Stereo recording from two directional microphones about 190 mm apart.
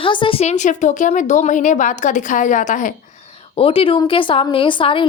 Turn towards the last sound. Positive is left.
turn(degrees=25)  # may be behind; listen again after turning